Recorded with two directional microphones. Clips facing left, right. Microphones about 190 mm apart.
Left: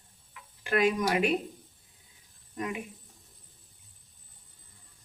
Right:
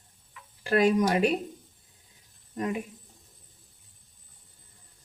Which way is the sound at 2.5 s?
40° right (ahead or behind).